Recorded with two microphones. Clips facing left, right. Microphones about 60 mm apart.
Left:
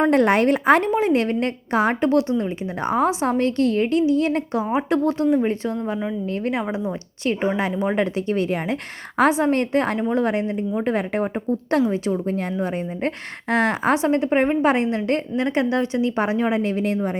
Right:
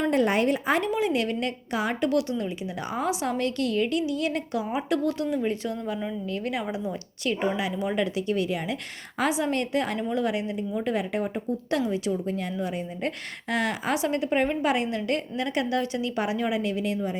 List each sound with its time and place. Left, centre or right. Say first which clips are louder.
0.1 s speech: left 6 dB; left
0.9 s a woman's voice: left 6 dB; left